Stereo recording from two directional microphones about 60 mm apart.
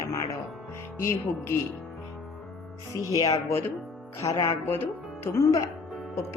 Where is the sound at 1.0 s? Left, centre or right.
Left.